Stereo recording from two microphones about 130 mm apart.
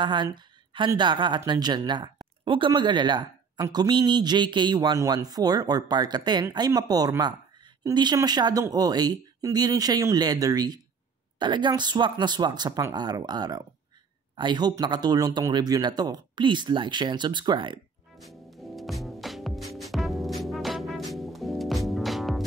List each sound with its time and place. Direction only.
0.0 s a woman's voice: 35° right (ahead or behind)
18.1 s music: centre (ahead or behind)